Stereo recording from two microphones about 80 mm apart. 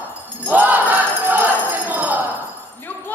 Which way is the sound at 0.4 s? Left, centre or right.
Right.